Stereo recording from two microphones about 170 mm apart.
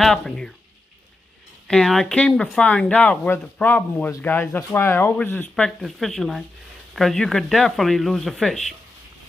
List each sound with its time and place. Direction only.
0.0 s speech: 5° left (ahead or behind)
1.7 s speech: centre (ahead or behind)
5.8 s speech: centre (ahead or behind)